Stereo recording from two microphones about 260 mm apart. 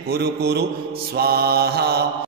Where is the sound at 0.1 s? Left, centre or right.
Right.